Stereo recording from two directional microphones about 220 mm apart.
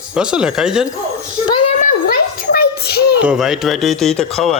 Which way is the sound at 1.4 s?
20° left (ahead or behind).